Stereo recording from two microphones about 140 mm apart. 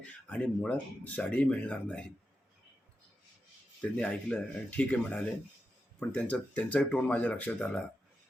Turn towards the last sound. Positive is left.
turn(degrees=10)  # may be behind; listen again after turning